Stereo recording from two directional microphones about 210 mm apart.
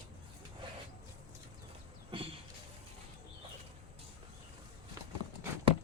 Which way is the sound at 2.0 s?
25° right (ahead or behind).